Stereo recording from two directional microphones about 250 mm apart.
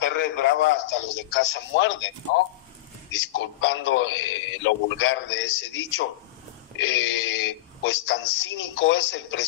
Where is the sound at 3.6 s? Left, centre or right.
Left.